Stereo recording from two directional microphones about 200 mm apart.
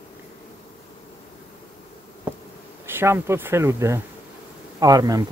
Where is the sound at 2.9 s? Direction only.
10° right (ahead or behind).